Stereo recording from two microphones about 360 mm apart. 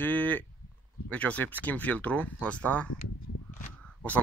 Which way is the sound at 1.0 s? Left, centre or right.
Centre.